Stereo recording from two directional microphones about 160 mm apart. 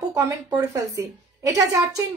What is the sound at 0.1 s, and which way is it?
A woman's voice, 20° right (ahead or behind).